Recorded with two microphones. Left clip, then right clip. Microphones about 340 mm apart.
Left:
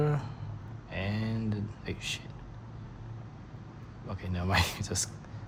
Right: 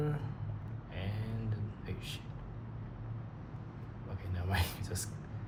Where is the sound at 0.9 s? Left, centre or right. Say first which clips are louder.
Left 9 dB; centre.